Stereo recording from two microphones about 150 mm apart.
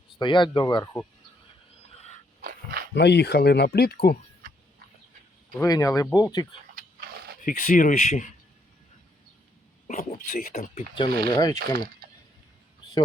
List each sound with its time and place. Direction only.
0.2 s speech: 30° left (ahead or behind)
2.0 s a sound: 45° left (ahead or behind)
2.4 s dog: 90° right
3.0 s speech: 90° left
5.5 s speech: 25° left (ahead or behind)
6.7 s a sound: 90° right
7.4 s speech: 65° left (ahead or behind)
9.8 s a sound: 65° left (ahead or behind)
10.1 s speech: 65° left (ahead or behind)
10.8 s speech: 35° left (ahead or behind)